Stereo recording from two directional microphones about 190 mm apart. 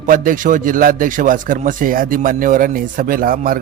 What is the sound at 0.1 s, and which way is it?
A man's voice, 45° right (ahead or behind).